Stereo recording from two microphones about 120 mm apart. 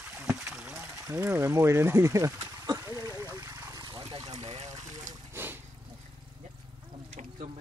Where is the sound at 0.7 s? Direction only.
15° right (ahead or behind); by 4.3 s 35° right (ahead or behind).